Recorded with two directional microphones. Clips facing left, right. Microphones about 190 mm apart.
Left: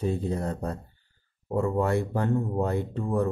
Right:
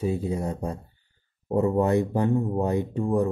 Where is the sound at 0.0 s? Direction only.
10° right (ahead or behind).